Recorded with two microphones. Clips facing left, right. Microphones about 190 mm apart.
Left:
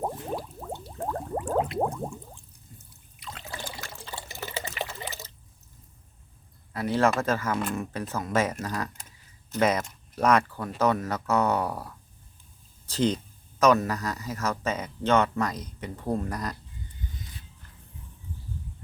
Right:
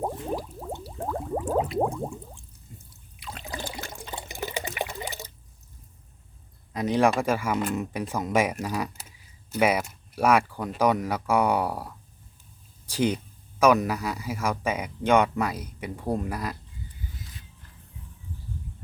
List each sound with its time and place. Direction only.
0.6 s boiling: 5° right (ahead or behind)
2.7 s drip: 20° right (ahead or behind)
3.2 s water: 10° right (ahead or behind)
6.7 s speech: 15° right (ahead or behind)